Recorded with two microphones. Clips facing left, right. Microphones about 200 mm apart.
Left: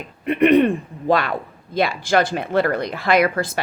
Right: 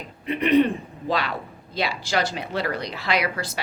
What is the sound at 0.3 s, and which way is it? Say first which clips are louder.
A man's voice: left 5 dB; 55° left (ahead or behind).